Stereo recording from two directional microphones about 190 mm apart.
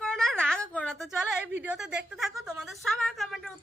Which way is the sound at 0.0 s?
5° left (ahead or behind).